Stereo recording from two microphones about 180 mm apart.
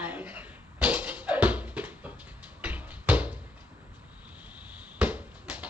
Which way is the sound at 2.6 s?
10° right (ahead or behind).